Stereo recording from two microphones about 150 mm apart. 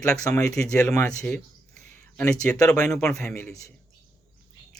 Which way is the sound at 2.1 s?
20° left (ahead or behind).